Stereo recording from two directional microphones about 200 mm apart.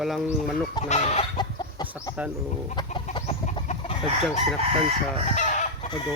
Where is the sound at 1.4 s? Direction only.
20° left (ahead or behind).